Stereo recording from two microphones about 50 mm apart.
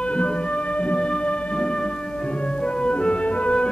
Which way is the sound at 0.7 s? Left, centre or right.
Left.